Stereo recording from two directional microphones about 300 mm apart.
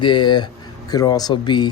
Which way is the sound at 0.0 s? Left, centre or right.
Centre.